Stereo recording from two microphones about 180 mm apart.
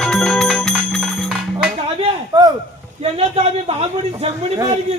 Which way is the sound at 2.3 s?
20° right (ahead or behind).